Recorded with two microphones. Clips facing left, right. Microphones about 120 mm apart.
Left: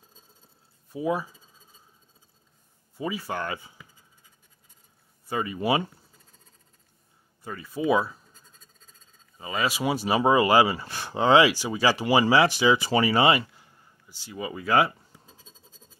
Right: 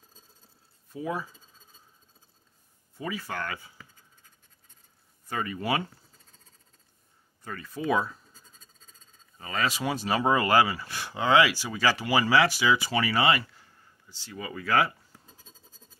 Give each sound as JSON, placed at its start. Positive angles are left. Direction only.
{"t": 0.9, "sound": "speech", "side_deg": 15}
{"t": 3.0, "sound": "speech", "side_deg": 15}
{"t": 5.3, "sound": "speech", "side_deg": 15}
{"t": 7.4, "sound": "speech", "side_deg": 10}